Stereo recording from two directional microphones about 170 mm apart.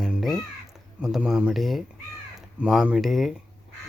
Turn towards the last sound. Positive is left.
turn(degrees=0)  # may be behind; listen again after turning